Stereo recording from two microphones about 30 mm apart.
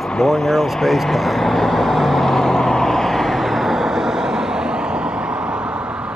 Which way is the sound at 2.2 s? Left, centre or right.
Centre.